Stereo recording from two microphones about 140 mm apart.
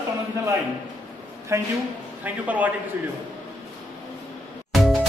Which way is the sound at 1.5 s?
20° right (ahead or behind).